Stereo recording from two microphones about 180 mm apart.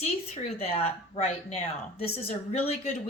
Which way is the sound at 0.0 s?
35° left (ahead or behind).